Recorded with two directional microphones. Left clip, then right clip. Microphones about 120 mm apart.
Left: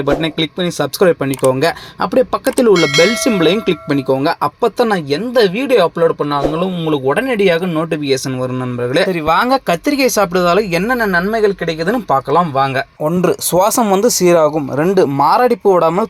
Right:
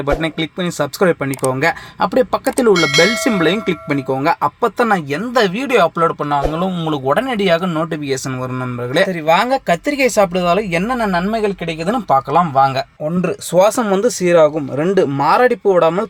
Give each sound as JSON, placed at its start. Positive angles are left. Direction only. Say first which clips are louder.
{"t": 0.0, "sound": "speech", "louder": "left 3 dB", "side_deg": 0}
{"t": 5.4, "sound": "speech", "louder": "left 2 dB", "side_deg": -15}
{"t": 6.6, "sound": "speech", "louder": "left 3 dB", "side_deg": -25}
{"t": 8.1, "sound": "speech", "louder": "left 4 dB", "side_deg": 0}
{"t": 13.1, "sound": "speech", "louder": "left 5 dB", "side_deg": 15}